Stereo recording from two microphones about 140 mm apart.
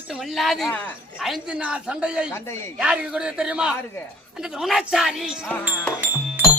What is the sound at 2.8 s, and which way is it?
A woman's voice, 5° right (ahead or behind).